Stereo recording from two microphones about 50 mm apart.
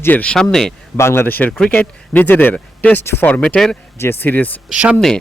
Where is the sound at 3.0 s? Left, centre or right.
Left.